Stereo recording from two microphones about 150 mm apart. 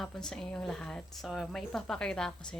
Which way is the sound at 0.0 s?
5° left (ahead or behind).